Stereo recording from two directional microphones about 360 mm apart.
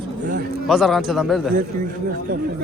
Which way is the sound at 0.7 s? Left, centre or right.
Centre.